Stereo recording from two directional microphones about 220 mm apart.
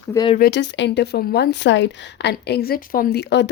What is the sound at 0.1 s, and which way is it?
Speech, 20° left (ahead or behind).